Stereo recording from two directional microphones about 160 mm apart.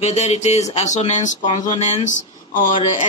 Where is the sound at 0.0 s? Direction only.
40° left (ahead or behind).